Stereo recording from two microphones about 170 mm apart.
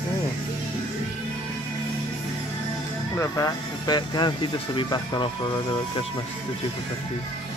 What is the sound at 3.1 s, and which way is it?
Speech, 20° left (ahead or behind).